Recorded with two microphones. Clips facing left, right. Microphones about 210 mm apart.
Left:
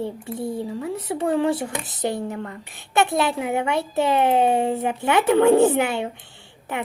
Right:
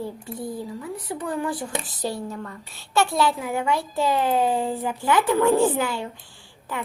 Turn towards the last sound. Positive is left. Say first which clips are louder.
# left 3 dB
turn(degrees=20)  # may be behind; listen again after turning